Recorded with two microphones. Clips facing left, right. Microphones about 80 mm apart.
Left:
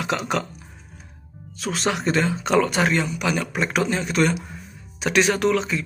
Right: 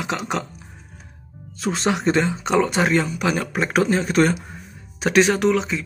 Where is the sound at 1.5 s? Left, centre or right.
Right.